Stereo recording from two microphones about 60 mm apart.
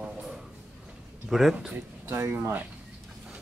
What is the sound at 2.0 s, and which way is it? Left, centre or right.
Speech, right.